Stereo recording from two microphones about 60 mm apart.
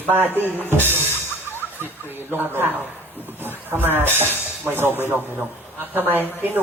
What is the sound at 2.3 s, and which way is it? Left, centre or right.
Speech, right.